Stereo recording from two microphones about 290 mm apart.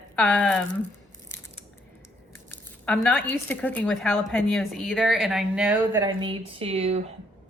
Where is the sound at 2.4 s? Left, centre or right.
Centre.